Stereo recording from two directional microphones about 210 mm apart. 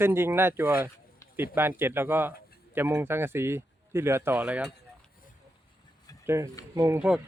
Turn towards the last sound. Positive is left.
turn(degrees=-10)  # may be behind; listen again after turning